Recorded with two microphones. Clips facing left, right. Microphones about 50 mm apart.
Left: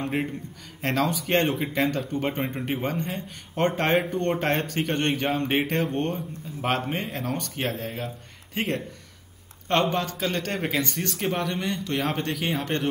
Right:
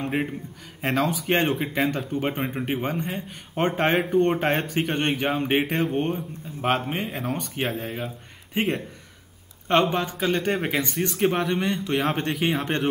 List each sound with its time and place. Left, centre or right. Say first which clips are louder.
0.0 s a man's voice: right 1 dB; centre